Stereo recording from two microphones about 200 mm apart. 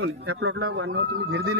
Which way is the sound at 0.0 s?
60° right (ahead or behind).